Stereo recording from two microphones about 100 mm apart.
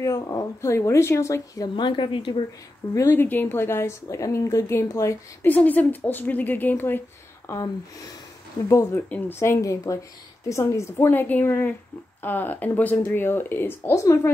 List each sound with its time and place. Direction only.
0.0 s speech: 35° left (ahead or behind)
1.8 s a woman's voice: 55° left (ahead or behind)
2.9 s speech: 30° left (ahead or behind)
5.4 s speech: 15° left (ahead or behind)
8.6 s speech: 30° left (ahead or behind)